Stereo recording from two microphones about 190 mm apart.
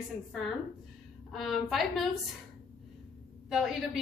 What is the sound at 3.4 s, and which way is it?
Speech, centre (ahead or behind).